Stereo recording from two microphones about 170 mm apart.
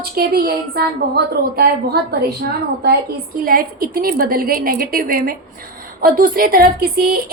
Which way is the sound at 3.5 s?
60° right (ahead or behind).